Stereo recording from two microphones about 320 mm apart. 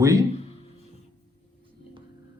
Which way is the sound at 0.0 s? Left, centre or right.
Centre.